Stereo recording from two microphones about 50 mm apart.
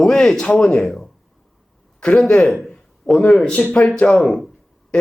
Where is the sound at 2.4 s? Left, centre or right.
Centre.